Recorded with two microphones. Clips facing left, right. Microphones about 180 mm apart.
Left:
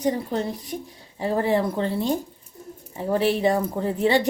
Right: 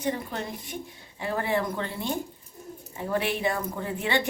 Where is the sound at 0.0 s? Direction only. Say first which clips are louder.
Left 6 dB; 35° left (ahead or behind).